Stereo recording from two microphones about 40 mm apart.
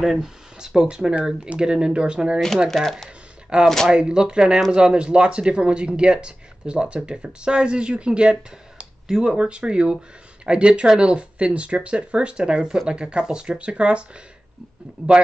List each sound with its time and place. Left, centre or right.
0.0 s speech: centre
0.6 s speech: centre
2.7 s speech: centre
3.5 s speech: right